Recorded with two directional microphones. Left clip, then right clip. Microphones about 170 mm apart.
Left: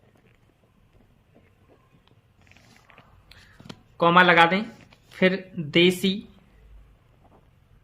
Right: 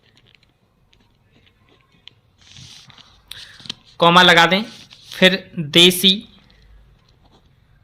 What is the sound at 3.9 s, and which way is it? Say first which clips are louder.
Speech: right 6 dB; 30° right (ahead or behind).